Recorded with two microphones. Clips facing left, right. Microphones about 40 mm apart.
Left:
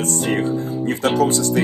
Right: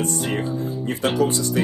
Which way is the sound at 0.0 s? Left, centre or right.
Left.